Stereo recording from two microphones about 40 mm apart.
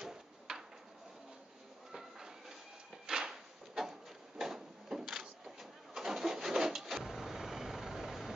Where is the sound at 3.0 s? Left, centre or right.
Centre.